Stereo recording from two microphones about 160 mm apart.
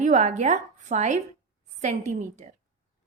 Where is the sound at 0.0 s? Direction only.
50° right (ahead or behind).